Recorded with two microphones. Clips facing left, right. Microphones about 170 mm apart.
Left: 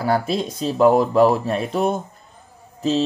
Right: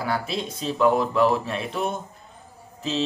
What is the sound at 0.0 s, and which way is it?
Speech, 40° left (ahead or behind).